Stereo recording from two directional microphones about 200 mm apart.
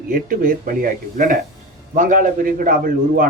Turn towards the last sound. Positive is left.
turn(degrees=-45)  # may be behind; listen again after turning